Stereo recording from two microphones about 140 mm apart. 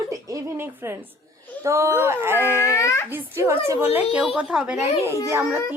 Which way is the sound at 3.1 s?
15° right (ahead or behind).